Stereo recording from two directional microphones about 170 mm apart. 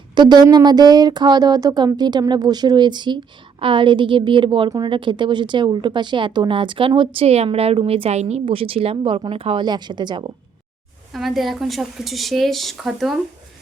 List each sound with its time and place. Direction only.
0.1 s speech: 25° right (ahead or behind)
11.1 s speech: centre (ahead or behind)